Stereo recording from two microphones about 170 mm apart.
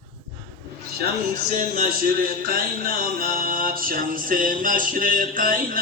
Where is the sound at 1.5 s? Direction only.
50° right (ahead or behind).